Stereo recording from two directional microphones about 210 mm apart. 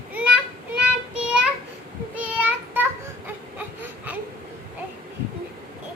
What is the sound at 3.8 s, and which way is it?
Baby cry, 10° right (ahead or behind).